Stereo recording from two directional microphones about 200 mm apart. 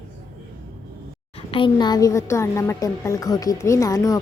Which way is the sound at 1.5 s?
25° left (ahead or behind).